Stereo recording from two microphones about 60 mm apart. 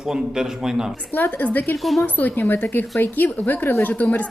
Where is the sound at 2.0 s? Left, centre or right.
Left.